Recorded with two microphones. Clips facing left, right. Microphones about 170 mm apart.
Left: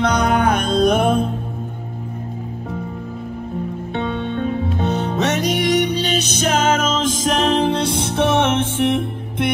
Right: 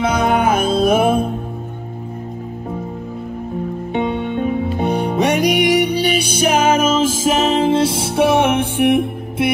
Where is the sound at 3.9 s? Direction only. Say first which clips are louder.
Right 4 dB; 15° right (ahead or behind).